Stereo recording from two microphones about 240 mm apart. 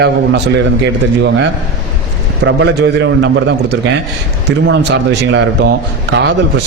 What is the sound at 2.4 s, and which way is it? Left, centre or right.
Speech, right.